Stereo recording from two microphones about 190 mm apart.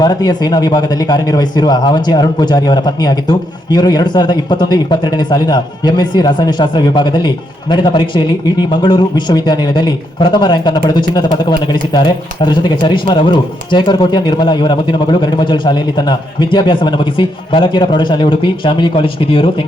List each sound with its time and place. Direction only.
0.0 s speech: 20° left (ahead or behind)